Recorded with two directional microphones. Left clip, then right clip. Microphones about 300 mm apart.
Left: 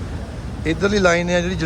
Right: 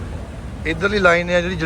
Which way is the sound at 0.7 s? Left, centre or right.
Centre.